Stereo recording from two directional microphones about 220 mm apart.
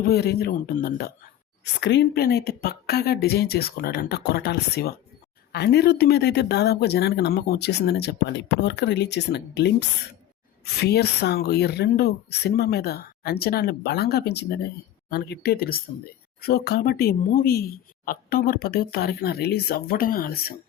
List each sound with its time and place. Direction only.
0.0 s speech: 45° left (ahead or behind)